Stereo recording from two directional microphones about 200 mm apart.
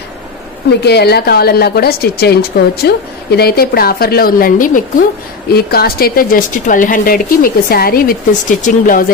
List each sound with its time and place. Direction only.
0.7 s a woman's voice: 55° left (ahead or behind)